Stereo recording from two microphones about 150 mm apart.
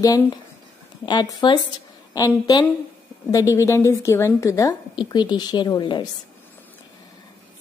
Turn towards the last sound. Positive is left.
turn(degrees=25)  # may be behind; listen again after turning